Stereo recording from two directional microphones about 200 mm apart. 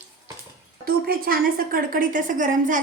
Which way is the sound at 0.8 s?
45° right (ahead or behind).